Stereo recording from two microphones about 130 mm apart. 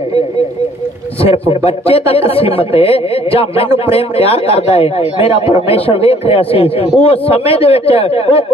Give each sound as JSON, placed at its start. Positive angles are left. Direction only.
{"t": 1.5, "sound": "a man's voice", "side_deg": 45}